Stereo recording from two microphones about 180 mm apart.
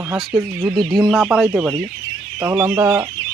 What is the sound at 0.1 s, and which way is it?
Speech, centre (ahead or behind).